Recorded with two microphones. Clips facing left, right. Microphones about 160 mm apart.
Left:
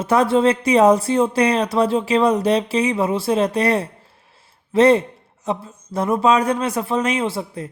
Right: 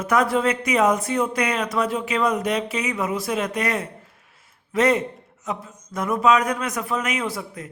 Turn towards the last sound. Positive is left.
turn(degrees=30)  # may be behind; listen again after turning